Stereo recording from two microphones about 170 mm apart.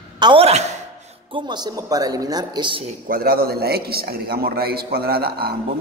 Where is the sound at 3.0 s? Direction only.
60° right (ahead or behind).